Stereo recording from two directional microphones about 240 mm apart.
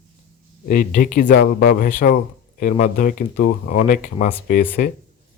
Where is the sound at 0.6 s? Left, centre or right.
Left.